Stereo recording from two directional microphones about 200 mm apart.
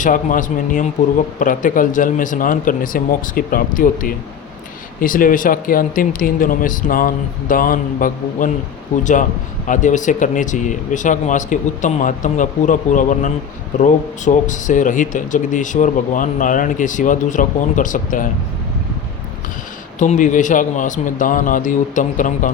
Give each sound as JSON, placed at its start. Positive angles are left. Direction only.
{"t": 0.0, "sound": "speech", "side_deg": 40}
{"t": 9.6, "sound": "speech", "side_deg": 40}
{"t": 20.0, "sound": "speech", "side_deg": 40}